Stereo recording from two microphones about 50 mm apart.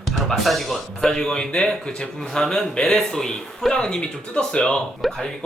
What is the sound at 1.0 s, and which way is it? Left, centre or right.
A man's voice, centre.